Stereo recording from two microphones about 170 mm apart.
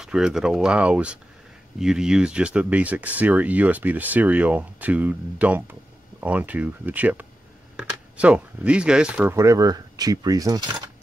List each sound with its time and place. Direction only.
0.0 s speech: 5° right (ahead or behind); by 10.8 s 20° right (ahead or behind)